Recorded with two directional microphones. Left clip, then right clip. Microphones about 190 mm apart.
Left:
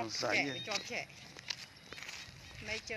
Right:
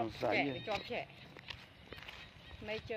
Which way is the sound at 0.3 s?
20° right (ahead or behind).